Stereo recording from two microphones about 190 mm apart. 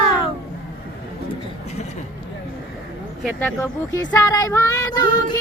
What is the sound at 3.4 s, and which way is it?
Speech, 10° left (ahead or behind).